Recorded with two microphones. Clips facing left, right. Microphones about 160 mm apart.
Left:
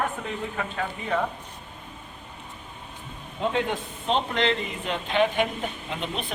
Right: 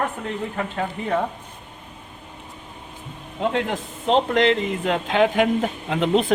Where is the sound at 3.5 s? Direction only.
90° right.